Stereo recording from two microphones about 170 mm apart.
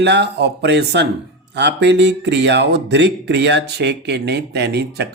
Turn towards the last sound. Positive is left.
turn(degrees=-80)